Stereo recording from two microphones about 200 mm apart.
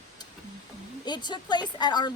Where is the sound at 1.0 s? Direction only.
20° left (ahead or behind).